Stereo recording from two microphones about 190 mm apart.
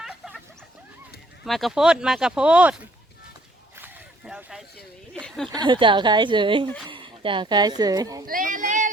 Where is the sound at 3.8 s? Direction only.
5° right (ahead or behind).